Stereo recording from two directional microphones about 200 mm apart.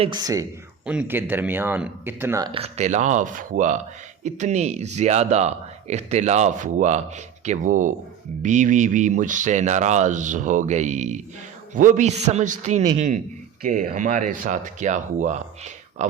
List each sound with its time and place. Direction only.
0.0 s speech: 20° right (ahead or behind)
0.9 s speech: 10° right (ahead or behind)
2.5 s speech: 30° right (ahead or behind)